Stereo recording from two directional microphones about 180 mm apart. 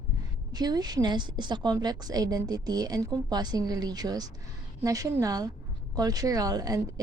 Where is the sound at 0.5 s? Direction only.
20° right (ahead or behind).